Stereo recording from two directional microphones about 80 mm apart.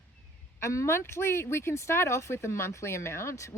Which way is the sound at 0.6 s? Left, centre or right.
Left.